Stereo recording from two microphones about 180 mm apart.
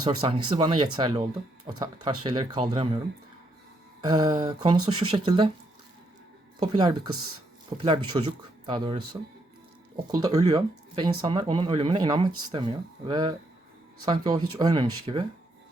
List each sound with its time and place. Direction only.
0.0 s speech: 30° right (ahead or behind)
4.0 s speech: 20° right (ahead or behind)
6.6 s speech: 25° right (ahead or behind)
10.1 s speech: 20° right (ahead or behind)